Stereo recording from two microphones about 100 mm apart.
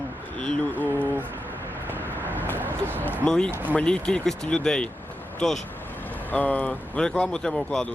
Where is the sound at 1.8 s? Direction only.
20° right (ahead or behind).